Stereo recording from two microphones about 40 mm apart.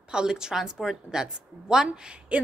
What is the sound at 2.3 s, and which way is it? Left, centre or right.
Speech, right.